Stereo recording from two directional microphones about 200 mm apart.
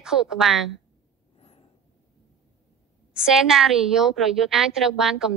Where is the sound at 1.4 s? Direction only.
30° left (ahead or behind).